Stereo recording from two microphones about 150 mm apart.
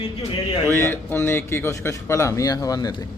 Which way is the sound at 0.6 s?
15° left (ahead or behind).